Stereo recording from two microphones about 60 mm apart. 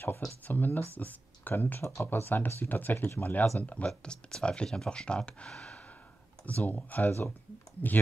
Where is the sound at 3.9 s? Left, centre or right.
Centre.